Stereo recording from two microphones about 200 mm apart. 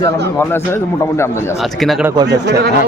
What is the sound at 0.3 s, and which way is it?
A man's voice, 10° left (ahead or behind).